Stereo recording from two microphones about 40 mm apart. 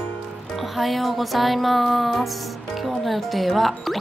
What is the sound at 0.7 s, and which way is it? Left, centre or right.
Speech, centre.